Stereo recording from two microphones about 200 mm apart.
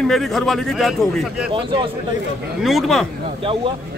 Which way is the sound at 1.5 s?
25° right (ahead or behind).